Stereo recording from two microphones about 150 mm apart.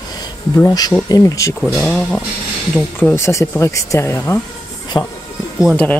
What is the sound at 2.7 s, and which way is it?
A woman's voice, 15° left (ahead or behind).